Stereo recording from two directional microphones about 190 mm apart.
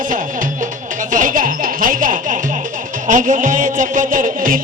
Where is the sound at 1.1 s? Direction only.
45° right (ahead or behind).